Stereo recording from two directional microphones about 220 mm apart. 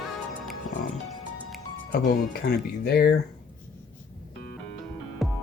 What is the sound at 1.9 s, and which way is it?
Speech, 45° left (ahead or behind).